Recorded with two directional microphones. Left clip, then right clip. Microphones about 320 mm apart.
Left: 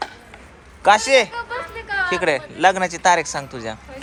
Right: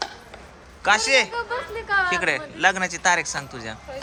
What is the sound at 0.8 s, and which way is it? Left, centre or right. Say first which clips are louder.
Speech: left 4 dB; centre.